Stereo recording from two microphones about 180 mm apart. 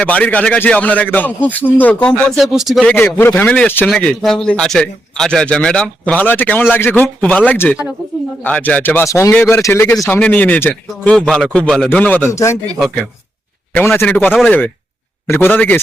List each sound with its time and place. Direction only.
0.0 s a man's voice: 5° left (ahead or behind)
13.7 s a man's voice: 10° left (ahead or behind)